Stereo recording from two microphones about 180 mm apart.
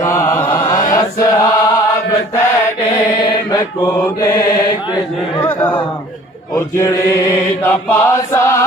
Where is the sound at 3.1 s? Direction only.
20° left (ahead or behind).